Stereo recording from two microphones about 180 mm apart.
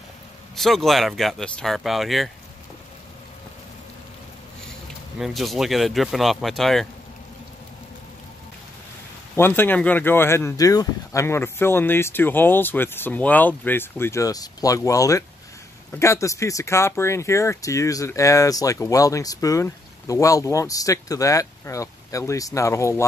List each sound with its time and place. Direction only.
0.6 s speech: centre (ahead or behind)
5.2 s speech: centre (ahead or behind)
9.3 s speech: 10° left (ahead or behind)